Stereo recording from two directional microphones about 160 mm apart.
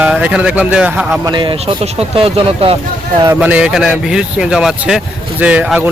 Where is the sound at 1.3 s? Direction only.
30° right (ahead or behind).